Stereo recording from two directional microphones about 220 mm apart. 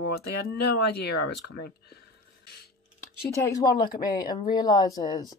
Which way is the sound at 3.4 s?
15° left (ahead or behind).